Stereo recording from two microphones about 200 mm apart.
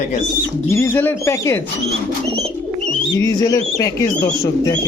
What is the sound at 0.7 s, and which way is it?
Speech, 15° left (ahead or behind).